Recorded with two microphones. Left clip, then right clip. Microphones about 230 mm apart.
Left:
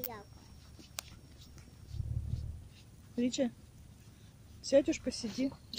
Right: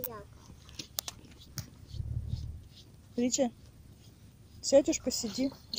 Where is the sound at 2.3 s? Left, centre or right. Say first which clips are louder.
Right 2 dB; centre.